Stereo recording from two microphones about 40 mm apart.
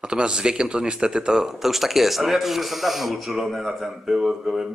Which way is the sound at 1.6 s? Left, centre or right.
Centre.